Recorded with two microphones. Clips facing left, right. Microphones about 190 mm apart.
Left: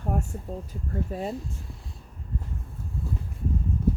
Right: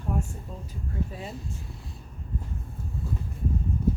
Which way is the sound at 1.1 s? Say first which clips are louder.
Left 7 dB; 50° left (ahead or behind).